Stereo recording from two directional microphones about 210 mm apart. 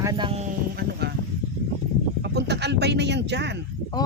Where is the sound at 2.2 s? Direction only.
55° right (ahead or behind).